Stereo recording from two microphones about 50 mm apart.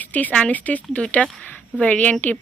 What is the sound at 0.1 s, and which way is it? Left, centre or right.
A woman's voice, left.